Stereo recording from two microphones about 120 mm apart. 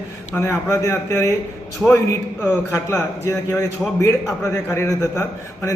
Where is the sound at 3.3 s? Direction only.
25° left (ahead or behind).